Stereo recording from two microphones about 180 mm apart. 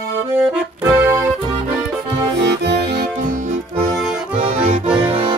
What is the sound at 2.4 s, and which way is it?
Music, 70° right (ahead or behind).